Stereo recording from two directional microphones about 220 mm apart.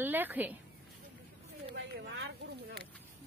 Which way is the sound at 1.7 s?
50° right (ahead or behind).